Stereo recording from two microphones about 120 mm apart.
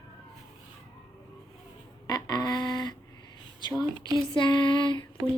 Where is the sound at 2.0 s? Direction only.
35° left (ahead or behind).